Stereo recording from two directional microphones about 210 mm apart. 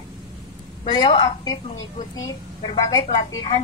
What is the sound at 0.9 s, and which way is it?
Speech, 25° left (ahead or behind).